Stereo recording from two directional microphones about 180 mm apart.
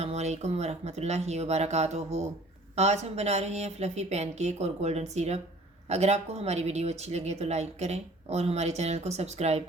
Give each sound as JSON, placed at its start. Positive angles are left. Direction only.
{"t": 0.0, "sound": "speech", "side_deg": -40}